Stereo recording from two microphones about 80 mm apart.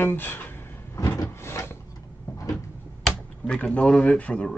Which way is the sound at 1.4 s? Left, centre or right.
Left.